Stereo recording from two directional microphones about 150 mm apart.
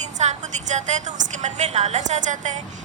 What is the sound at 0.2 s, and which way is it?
A woman's voice, 50° right (ahead or behind).